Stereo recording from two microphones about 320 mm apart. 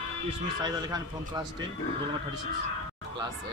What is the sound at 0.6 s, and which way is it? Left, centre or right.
Speech, centre.